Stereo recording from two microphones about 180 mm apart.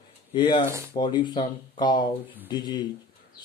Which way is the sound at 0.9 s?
25° left (ahead or behind).